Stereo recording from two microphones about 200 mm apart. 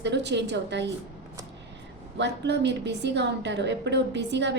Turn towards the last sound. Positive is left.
turn(degrees=-60)  # may be behind; listen again after turning